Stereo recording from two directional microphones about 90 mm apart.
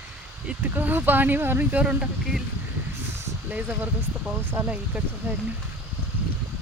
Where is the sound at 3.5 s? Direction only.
15° right (ahead or behind).